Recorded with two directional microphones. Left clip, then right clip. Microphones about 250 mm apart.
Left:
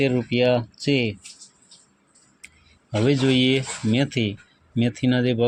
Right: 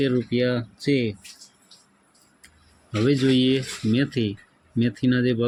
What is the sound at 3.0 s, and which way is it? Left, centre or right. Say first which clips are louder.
Speech: left 1 dB; centre.